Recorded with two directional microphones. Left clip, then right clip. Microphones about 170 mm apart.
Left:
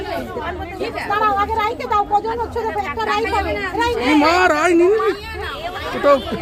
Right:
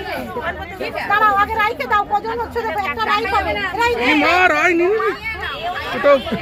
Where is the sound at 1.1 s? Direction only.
40° right (ahead or behind).